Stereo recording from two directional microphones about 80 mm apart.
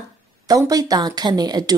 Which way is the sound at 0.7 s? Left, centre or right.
Right.